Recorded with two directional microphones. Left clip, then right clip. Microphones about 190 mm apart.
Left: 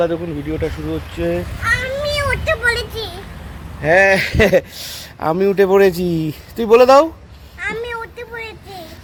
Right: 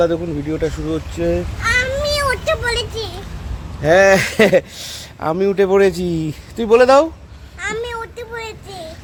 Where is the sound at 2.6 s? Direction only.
Centre (ahead or behind).